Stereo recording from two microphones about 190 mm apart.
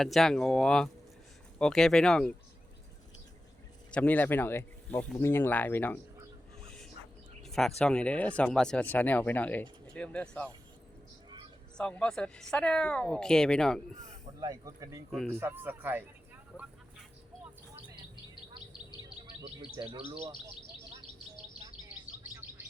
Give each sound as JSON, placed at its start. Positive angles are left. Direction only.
{"t": 0.0, "sound": "speech", "side_deg": 0}
{"t": 3.9, "sound": "speech", "side_deg": 10}
{"t": 7.4, "sound": "a sound", "side_deg": 0}
{"t": 7.8, "sound": "speech", "side_deg": 5}
{"t": 11.8, "sound": "speech", "side_deg": 5}
{"t": 14.4, "sound": "speech", "side_deg": -20}
{"t": 15.1, "sound": "speech", "side_deg": 5}
{"t": 15.4, "sound": "speech", "side_deg": -10}
{"t": 19.0, "sound": "chirp", "side_deg": -25}